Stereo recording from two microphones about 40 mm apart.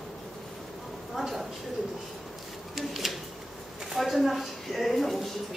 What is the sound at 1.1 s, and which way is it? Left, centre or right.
Speech, centre.